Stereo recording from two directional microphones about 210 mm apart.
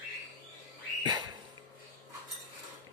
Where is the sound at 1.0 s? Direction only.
20° right (ahead or behind).